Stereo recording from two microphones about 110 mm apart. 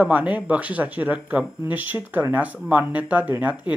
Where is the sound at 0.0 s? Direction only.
15° right (ahead or behind).